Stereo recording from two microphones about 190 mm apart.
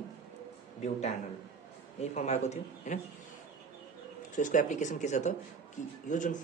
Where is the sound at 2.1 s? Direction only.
35° left (ahead or behind).